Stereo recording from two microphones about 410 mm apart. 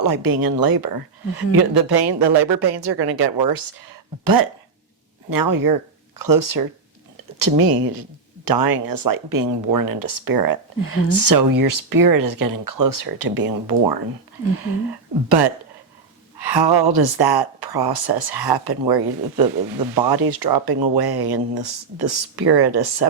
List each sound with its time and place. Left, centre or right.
0.0 s a woman's voice: right
15.3 s a woman's voice: right